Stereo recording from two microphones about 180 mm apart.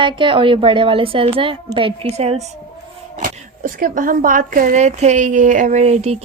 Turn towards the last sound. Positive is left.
turn(degrees=-40)  # may be behind; listen again after turning